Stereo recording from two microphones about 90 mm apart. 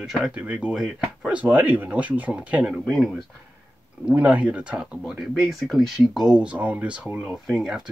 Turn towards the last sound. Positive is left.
turn(degrees=-5)  # may be behind; listen again after turning